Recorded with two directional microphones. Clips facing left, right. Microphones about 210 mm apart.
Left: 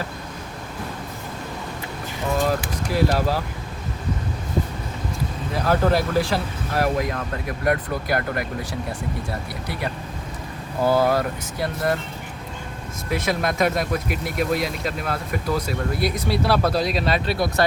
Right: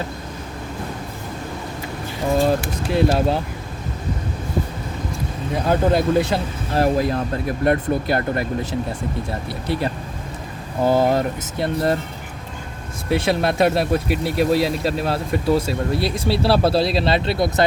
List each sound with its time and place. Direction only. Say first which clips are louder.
2.3 s speech: right 4 dB; 30° right (ahead or behind)
5.5 s speech: right 2 dB; 20° right (ahead or behind)
9.5 s speech: right 6 dB; 25° right (ahead or behind)
13.1 s speech: right 4 dB; 30° right (ahead or behind)